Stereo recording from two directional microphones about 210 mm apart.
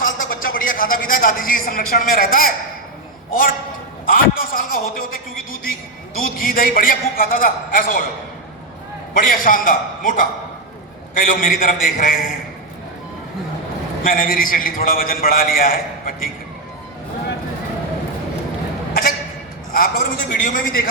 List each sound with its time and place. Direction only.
0.0 s a man's voice: 40° left (ahead or behind)
4.0 s a man's voice: 40° left (ahead or behind)
9.1 s a man's voice: 40° left (ahead or behind)
14.0 s a man's voice: 40° left (ahead or behind)
19.7 s a man's voice: 40° left (ahead or behind)